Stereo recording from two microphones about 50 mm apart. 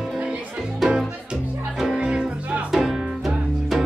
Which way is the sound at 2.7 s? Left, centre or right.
Centre.